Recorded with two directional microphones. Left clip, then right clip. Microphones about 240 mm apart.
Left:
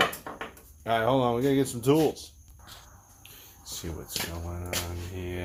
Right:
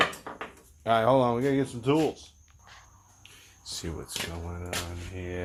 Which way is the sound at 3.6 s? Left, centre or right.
Right.